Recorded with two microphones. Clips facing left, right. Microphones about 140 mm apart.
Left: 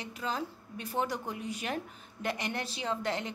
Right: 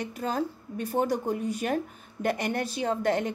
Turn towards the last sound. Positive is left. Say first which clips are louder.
# right 7 dB
turn(degrees=-50)  # may be behind; listen again after turning